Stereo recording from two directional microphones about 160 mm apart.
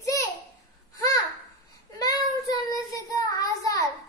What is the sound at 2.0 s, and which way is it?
Child singing, 25° left (ahead or behind).